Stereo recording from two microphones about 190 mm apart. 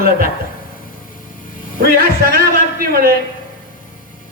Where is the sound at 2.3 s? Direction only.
50° right (ahead or behind).